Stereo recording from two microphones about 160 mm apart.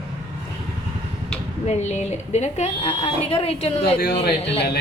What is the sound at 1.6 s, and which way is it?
A woman's voice, 45° left (ahead or behind).